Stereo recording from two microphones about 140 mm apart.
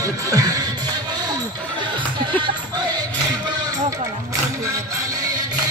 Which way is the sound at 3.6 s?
25° right (ahead or behind).